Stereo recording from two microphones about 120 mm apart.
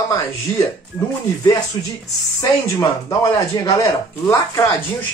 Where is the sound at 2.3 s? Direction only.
25° left (ahead or behind).